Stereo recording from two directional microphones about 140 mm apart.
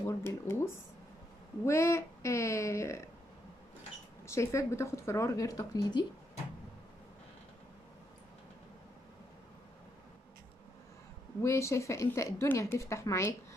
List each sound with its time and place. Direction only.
0.0 s speech: 20° left (ahead or behind)
4.3 s speech: 20° left (ahead or behind)
11.4 s speech: 20° left (ahead or behind)